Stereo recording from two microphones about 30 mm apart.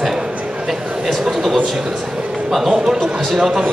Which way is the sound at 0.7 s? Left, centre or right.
Centre.